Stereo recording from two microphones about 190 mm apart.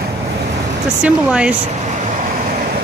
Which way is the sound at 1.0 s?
5° right (ahead or behind).